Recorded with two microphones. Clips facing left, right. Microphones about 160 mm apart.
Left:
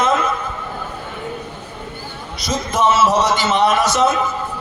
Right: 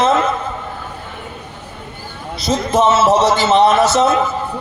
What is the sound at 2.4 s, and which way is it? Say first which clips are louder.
A man's voice: right 3 dB; 25° right (ahead or behind).